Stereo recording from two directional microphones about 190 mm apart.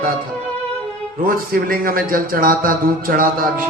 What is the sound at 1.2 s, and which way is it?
A man's voice, 50° right (ahead or behind).